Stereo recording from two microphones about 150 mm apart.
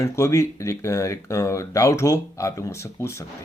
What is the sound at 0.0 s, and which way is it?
Speech, 20° left (ahead or behind).